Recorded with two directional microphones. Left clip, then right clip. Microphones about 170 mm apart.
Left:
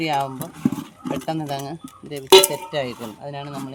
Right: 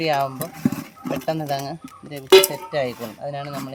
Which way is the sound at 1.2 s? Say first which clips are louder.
Right 4 dB; 30° right (ahead or behind).